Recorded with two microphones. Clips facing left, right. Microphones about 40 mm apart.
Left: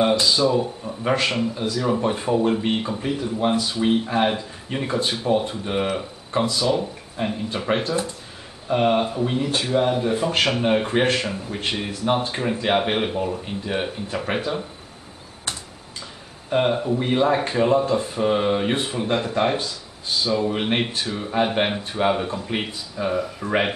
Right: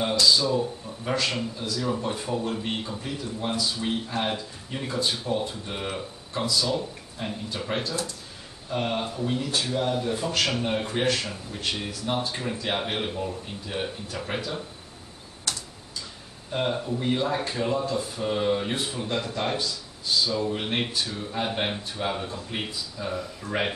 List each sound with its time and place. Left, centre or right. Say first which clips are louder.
0.0 s speech: left 4 dB; left
16.4 s speech: left 7 dB; left